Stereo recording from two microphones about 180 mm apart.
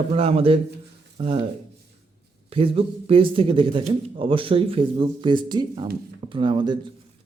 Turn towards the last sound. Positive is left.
turn(degrees=-25)  # may be behind; listen again after turning